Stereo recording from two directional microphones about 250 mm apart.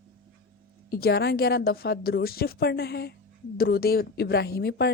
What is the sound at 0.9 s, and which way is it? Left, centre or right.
A woman's voice, left.